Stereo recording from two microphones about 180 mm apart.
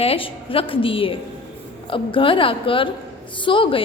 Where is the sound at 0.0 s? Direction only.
30° left (ahead or behind).